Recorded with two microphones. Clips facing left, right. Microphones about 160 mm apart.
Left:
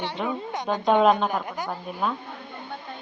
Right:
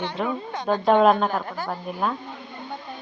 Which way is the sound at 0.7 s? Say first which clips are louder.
Right 2 dB; centre (ahead or behind).